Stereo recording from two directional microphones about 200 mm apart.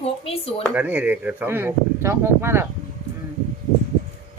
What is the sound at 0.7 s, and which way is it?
Speech, 10° right (ahead or behind).